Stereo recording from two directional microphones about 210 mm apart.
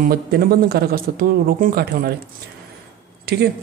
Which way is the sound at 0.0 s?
45° right (ahead or behind).